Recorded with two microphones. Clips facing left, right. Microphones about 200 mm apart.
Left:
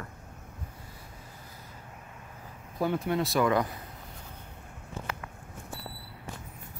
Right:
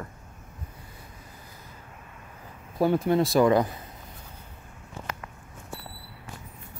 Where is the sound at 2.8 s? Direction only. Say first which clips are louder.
Right 6 dB; 35° right (ahead or behind).